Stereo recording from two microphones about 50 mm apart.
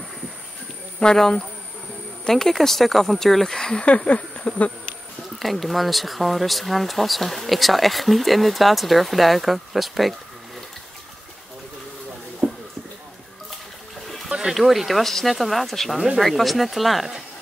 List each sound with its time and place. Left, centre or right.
1.0 s a sound: centre
2.2 s speech: centre
3.8 s a sound: left
5.4 s speech: centre
12.4 s clip-clop: centre
14.5 s speech: centre